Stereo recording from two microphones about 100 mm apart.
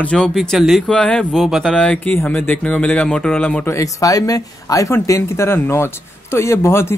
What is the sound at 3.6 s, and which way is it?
Speech, 30° left (ahead or behind).